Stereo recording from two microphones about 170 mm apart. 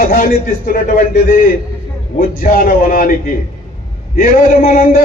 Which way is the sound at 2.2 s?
55° left (ahead or behind).